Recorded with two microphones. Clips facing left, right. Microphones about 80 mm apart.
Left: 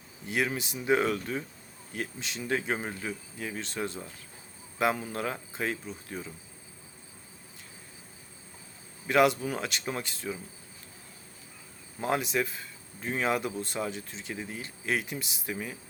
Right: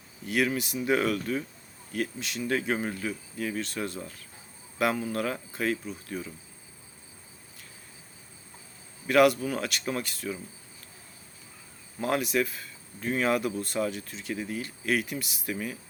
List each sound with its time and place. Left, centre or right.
0.3 s speech: left
9.0 s speech: left
11.9 s speech: centre